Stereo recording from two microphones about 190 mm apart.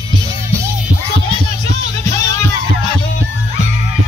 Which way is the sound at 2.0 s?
15° left (ahead or behind).